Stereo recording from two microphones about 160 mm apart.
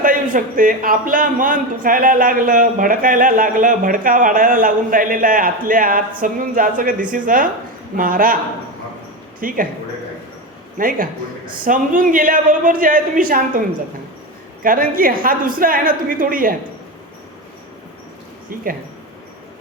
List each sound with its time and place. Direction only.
0.0 s a man's voice: 60° right (ahead or behind)
9.4 s a man's voice: 60° right (ahead or behind)
10.8 s a man's voice: 60° right (ahead or behind)
14.6 s a man's voice: 60° right (ahead or behind)